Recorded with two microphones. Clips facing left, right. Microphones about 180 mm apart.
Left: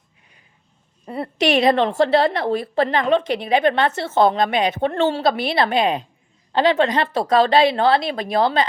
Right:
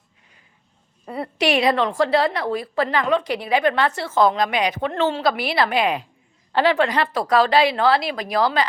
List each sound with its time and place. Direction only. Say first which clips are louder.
1.6 s a woman's voice: left 3 dB; 25° left (ahead or behind)